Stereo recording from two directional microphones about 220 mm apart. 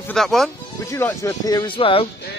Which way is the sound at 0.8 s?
15° left (ahead or behind).